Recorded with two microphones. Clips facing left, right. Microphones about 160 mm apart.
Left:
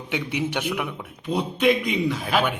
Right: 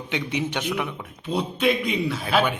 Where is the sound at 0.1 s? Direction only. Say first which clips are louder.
Left 1 dB; 10° left (ahead or behind).